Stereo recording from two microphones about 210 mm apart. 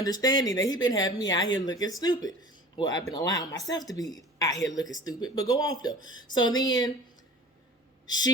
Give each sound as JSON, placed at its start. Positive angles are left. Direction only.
{"t": 0.0, "sound": "a woman's voice", "side_deg": 20}
{"t": 8.0, "sound": "speech", "side_deg": 20}